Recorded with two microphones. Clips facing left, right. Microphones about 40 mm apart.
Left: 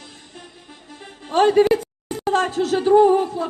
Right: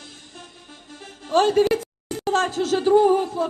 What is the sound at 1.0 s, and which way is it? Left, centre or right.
Music, centre.